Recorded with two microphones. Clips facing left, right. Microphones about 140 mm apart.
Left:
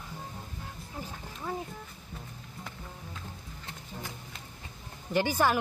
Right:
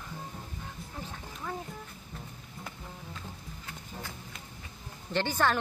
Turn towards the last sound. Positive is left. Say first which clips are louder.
# left 2 dB
turn(degrees=10)  # may be behind; listen again after turning